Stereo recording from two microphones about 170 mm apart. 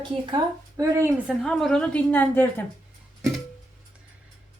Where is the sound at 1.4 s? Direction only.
5° left (ahead or behind).